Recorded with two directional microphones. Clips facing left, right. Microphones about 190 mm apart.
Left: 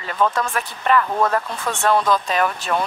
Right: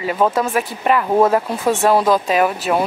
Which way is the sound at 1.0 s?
25° right (ahead or behind).